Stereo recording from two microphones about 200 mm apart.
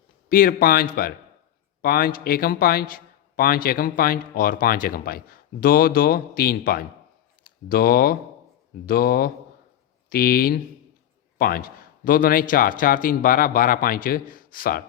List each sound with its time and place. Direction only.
0.3 s a man's voice: 45° left (ahead or behind)